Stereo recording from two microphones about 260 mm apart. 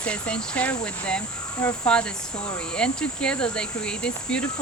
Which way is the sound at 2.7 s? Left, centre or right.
Centre.